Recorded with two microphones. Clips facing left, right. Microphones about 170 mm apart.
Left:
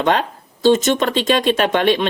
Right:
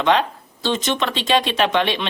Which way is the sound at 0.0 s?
45° left (ahead or behind).